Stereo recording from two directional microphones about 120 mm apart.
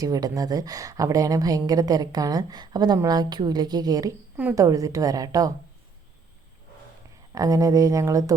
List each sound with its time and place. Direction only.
0.0 s a woman's voice: 30° right (ahead or behind)
7.3 s a woman's voice: 30° right (ahead or behind)